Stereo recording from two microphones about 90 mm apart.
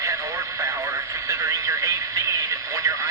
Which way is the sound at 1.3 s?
35° right (ahead or behind).